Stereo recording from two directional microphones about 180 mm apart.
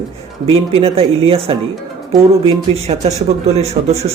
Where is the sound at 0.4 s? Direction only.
30° right (ahead or behind).